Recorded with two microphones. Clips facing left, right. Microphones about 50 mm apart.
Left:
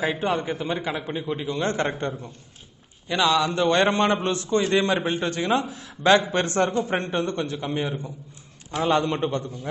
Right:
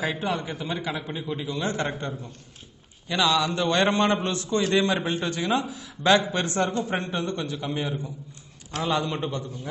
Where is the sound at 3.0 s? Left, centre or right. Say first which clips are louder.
Left 2 dB; left.